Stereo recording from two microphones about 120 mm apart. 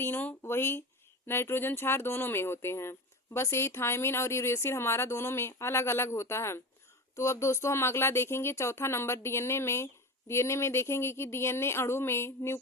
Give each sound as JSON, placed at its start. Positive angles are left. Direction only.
{"t": 0.0, "sound": "speech", "side_deg": 15}